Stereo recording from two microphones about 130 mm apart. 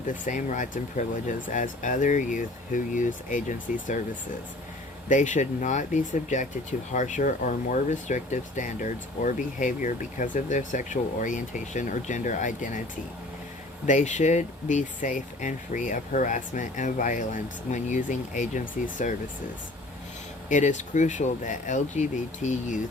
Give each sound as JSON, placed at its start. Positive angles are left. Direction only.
{"t": 0.1, "sound": "speech", "side_deg": 75}
{"t": 5.0, "sound": "speech", "side_deg": 75}
{"t": 13.8, "sound": "speech", "side_deg": 70}
{"t": 20.5, "sound": "speech", "side_deg": 70}